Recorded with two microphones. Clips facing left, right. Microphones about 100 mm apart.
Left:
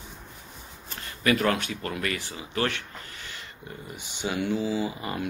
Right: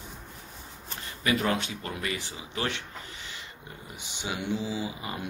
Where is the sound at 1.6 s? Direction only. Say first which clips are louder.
Left 3 dB; 20° right (ahead or behind).